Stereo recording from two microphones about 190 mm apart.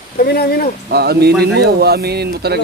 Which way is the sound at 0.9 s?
55° right (ahead or behind).